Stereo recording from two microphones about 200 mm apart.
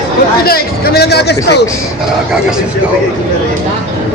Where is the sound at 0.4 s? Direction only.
50° left (ahead or behind).